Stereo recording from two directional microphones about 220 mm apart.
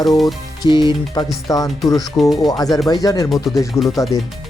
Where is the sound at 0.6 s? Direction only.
20° left (ahead or behind).